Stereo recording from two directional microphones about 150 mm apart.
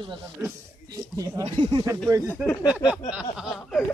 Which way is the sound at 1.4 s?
30° right (ahead or behind).